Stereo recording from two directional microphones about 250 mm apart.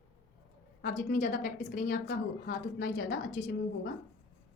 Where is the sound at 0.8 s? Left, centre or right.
Left.